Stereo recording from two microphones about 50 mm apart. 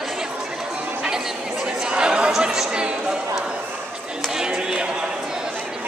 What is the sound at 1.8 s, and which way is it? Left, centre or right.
Chatter, centre.